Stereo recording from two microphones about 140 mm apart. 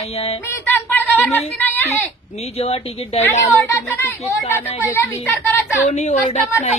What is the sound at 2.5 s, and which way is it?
Speech, 45° left (ahead or behind).